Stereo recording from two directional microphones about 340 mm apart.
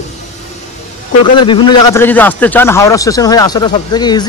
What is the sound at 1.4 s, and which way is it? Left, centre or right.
Speech, centre.